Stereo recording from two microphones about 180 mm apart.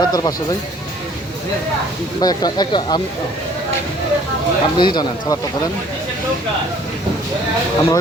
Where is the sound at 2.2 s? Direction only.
20° left (ahead or behind).